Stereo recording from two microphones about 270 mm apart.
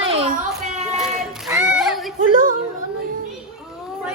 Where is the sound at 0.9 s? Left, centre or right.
Centre.